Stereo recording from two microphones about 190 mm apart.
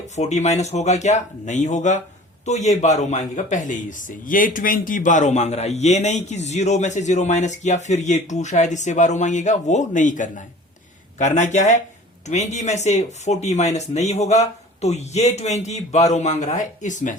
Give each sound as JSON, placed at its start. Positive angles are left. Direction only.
{"t": 0.2, "sound": "a man's voice", "side_deg": 35}